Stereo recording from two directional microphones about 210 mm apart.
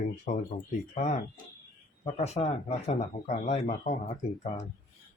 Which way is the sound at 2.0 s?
30° left (ahead or behind).